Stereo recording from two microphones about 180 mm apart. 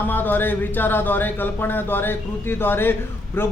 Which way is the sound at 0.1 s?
10° left (ahead or behind).